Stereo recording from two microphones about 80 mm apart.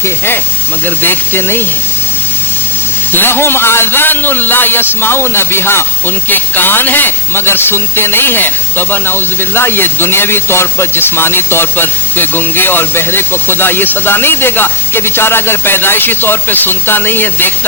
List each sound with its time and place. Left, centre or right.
0.9 s speech: left
3.1 s speech: left